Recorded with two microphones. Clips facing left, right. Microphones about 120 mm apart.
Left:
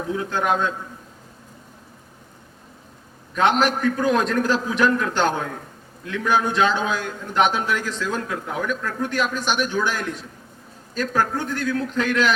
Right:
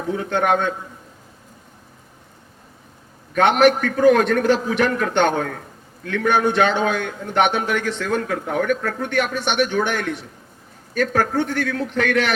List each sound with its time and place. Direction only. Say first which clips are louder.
0.3 s a man's voice: right 4 dB; 65° right (ahead or behind)
3.3 s a man's voice: right 4 dB; 65° right (ahead or behind)